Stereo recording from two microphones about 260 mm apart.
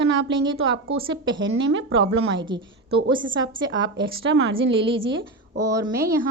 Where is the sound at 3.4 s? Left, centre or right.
Centre.